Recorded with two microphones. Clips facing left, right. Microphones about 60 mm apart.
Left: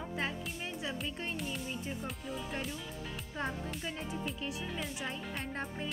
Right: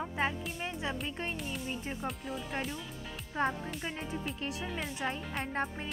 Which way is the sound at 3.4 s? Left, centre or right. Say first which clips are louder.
Right 6 dB; right.